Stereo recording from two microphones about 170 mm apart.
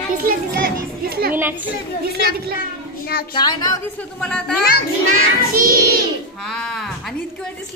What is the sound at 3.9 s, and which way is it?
Speech, 10° left (ahead or behind).